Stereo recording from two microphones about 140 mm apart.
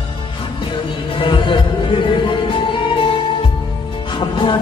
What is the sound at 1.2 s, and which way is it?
Music, 35° left (ahead or behind).